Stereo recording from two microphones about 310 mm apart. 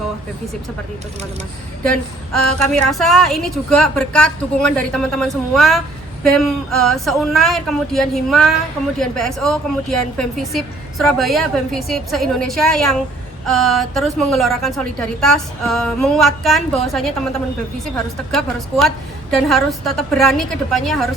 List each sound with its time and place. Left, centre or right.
1.8 s a woman's voice: centre